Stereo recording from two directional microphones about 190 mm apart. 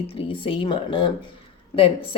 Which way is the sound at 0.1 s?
30° left (ahead or behind).